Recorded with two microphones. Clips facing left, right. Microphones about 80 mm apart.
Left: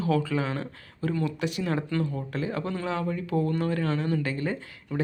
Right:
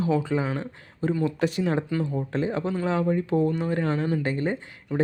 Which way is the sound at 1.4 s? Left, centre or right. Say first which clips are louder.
Right 5 dB; right.